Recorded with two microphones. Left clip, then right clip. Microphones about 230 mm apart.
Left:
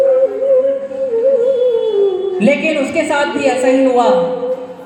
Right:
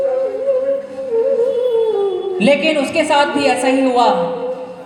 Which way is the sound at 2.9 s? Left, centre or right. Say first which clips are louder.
Right 1 dB; right.